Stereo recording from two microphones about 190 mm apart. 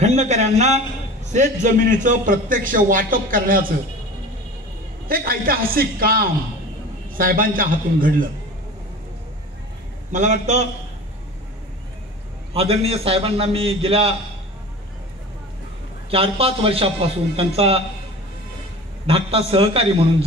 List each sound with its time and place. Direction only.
0.0 s a man's voice: 35° right (ahead or behind)
5.0 s a man's voice: 50° right (ahead or behind)
10.1 s a man's voice: 40° right (ahead or behind)
12.5 s a man's voice: 30° right (ahead or behind)
16.1 s a man's voice: 30° right (ahead or behind)
19.0 s a man's voice: 30° right (ahead or behind)